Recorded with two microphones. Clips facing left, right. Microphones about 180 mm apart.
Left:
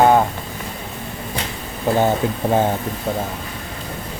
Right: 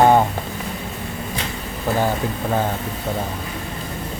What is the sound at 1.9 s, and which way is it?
Speech, 20° left (ahead or behind).